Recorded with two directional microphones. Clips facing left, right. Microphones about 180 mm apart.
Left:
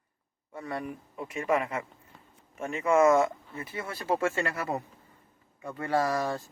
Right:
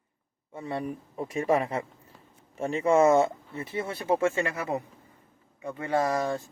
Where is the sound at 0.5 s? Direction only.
25° right (ahead or behind).